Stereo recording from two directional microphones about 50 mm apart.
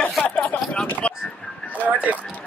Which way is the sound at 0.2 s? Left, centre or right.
Left.